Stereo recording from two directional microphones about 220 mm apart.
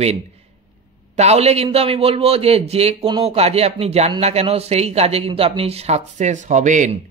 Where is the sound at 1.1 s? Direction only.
30° right (ahead or behind).